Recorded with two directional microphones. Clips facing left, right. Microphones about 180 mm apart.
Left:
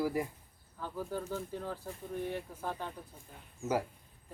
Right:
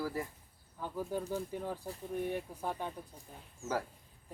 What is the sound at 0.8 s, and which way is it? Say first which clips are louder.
Speech: right 1 dB; 15° right (ahead or behind).